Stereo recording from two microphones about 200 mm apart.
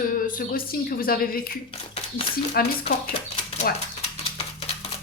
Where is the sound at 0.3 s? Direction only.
45° left (ahead or behind).